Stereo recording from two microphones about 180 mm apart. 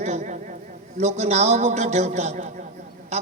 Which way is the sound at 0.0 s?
40° right (ahead or behind).